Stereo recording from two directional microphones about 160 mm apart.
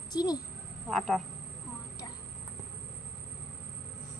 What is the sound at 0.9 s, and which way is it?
Speech, centre (ahead or behind).